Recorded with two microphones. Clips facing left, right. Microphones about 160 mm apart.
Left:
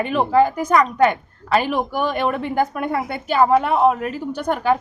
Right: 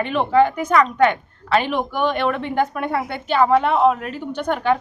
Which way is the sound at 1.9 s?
40° left (ahead or behind).